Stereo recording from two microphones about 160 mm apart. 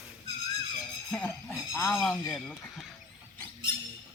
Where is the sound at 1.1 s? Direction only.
5° left (ahead or behind).